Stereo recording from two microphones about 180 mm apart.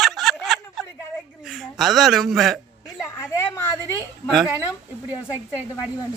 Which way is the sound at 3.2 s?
15° left (ahead or behind).